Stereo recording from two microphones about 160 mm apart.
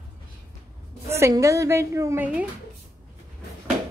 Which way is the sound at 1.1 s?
20° right (ahead or behind).